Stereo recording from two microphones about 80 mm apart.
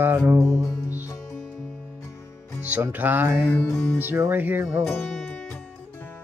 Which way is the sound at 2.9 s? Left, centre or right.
Right.